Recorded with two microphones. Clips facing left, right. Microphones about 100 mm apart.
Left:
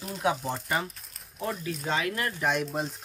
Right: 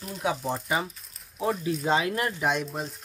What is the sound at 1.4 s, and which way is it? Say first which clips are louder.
Speech: right 5 dB; 25° right (ahead or behind).